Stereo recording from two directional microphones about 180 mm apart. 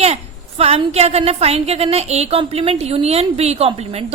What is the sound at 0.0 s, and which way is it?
A woman's voice, 35° right (ahead or behind).